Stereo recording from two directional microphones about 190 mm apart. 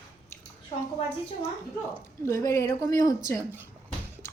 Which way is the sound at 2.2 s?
15° left (ahead or behind).